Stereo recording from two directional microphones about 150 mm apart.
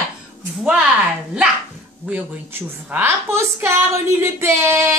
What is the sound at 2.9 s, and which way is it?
Speech, 15° right (ahead or behind).